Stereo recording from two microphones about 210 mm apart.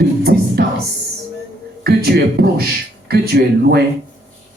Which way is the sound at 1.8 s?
50° right (ahead or behind).